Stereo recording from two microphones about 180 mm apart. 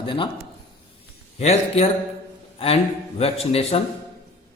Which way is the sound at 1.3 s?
35° left (ahead or behind).